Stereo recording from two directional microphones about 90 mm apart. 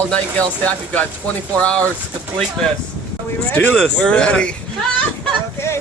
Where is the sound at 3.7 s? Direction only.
5° left (ahead or behind).